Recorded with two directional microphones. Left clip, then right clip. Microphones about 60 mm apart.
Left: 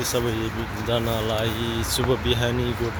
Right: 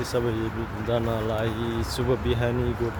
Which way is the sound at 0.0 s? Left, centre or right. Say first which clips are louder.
Left 2 dB; centre.